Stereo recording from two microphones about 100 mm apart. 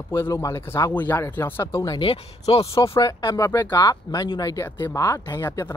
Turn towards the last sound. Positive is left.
turn(degrees=25)  # may be behind; listen again after turning